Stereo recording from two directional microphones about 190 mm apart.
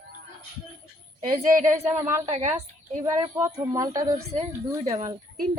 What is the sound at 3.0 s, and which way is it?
A woman's voice, 15° right (ahead or behind).